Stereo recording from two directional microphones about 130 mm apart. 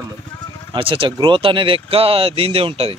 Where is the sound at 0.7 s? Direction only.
40° right (ahead or behind).